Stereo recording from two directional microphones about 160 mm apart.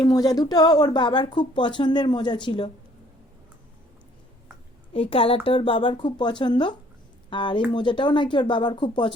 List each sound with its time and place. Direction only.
0.0 s speech: 25° left (ahead or behind)
4.9 s speech: 35° left (ahead or behind)